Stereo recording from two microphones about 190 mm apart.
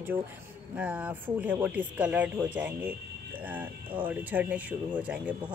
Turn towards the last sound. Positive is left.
turn(degrees=-5)  # may be behind; listen again after turning